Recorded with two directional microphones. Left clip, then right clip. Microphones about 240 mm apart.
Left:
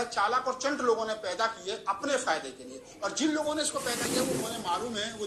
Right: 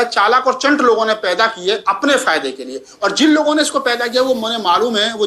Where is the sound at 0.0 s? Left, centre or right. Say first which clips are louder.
Right 15 dB; right.